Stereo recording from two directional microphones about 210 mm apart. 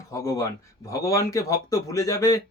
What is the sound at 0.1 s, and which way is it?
Speech, 15° left (ahead or behind).